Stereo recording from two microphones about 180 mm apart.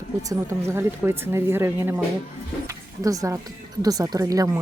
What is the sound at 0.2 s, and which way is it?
Speech, 15° right (ahead or behind).